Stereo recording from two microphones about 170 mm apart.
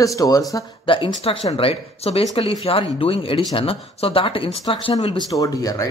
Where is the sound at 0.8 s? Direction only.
30° left (ahead or behind).